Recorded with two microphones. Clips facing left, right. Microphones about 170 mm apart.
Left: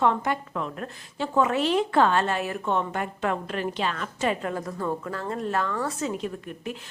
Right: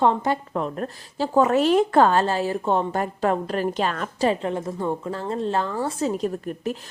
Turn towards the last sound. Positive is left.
turn(degrees=-40)  # may be behind; listen again after turning